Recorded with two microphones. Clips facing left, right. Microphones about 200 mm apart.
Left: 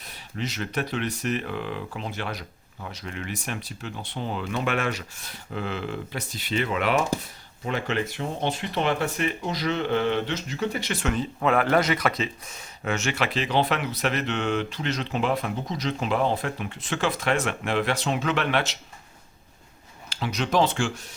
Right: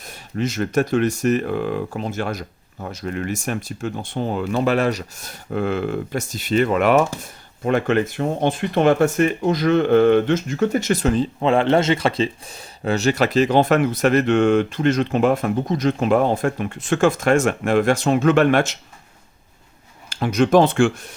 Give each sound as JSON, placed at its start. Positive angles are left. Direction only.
{"t": 0.0, "sound": "speech", "side_deg": -45}
{"t": 20.1, "sound": "speech", "side_deg": -50}